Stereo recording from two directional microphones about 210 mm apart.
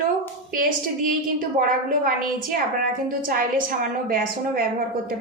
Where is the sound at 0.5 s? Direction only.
40° right (ahead or behind).